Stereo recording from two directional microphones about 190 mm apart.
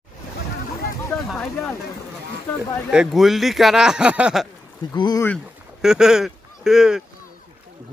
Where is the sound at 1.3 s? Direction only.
5° left (ahead or behind).